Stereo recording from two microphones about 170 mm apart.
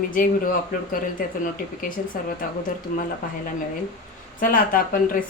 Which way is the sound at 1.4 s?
55° left (ahead or behind).